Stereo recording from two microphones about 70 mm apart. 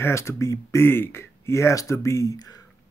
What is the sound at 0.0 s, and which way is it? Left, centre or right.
Speech, left.